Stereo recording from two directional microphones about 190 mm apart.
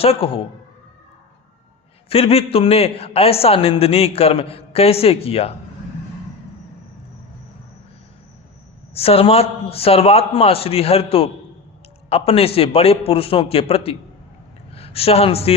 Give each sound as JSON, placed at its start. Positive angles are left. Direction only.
{"t": 0.0, "sound": "a man's voice", "side_deg": 30}
{"t": 2.0, "sound": "a man's voice", "side_deg": 30}
{"t": 9.0, "sound": "a man's voice", "side_deg": 30}